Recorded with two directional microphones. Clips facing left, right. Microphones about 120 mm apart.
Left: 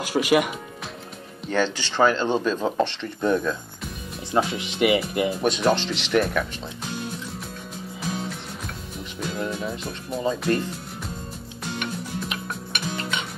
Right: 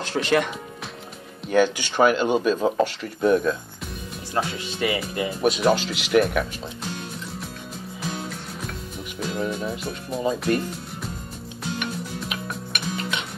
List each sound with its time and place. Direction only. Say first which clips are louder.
0.0 s speech: left 2 dB; 10° left (ahead or behind)
1.5 s speech: right 4 dB; 15° right (ahead or behind)
4.6 s speech: left 5 dB; 20° left (ahead or behind)
5.4 s speech: right 4 dB; 5° right (ahead or behind)
9.2 s speech: right 2 dB; centre (ahead or behind)
12.3 s music: right 1 dB; centre (ahead or behind)